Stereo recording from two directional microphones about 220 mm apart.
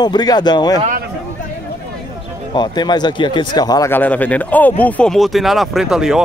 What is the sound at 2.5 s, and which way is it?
Speech, 20° left (ahead or behind).